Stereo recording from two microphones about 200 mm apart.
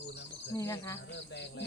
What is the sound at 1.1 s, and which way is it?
Cricket, 60° left (ahead or behind).